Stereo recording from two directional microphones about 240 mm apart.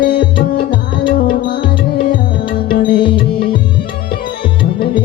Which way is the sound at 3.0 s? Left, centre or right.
Left.